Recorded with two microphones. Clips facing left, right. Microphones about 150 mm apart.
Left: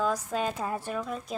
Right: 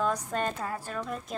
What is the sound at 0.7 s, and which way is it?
Speech, 20° left (ahead or behind).